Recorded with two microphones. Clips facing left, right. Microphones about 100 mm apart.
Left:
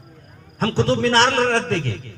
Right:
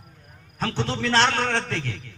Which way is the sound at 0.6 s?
35° left (ahead or behind).